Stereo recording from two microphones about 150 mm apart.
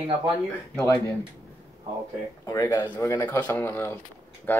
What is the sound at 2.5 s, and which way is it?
Speech, 25° left (ahead or behind).